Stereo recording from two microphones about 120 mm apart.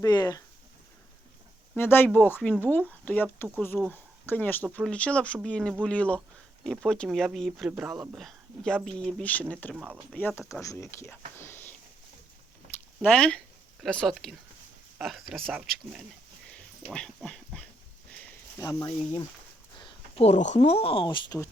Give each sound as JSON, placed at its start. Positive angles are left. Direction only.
{"t": 0.0, "sound": "speech", "side_deg": 35}
{"t": 1.7, "sound": "speech", "side_deg": 15}
{"t": 7.7, "sound": "speech", "side_deg": -20}
{"t": 8.1, "sound": "speech", "side_deg": 5}
{"t": 9.7, "sound": "speech", "side_deg": -10}
{"t": 10.2, "sound": "speech", "side_deg": 20}
{"t": 11.3, "sound": "a sound", "side_deg": 20}
{"t": 13.0, "sound": "speech", "side_deg": 10}
{"t": 17.2, "sound": "dog", "side_deg": 5}
{"t": 18.1, "sound": "a sound", "side_deg": 10}
{"t": 18.6, "sound": "speech", "side_deg": 30}
{"t": 19.8, "sound": "a sound", "side_deg": 40}
{"t": 20.2, "sound": "speech", "side_deg": 75}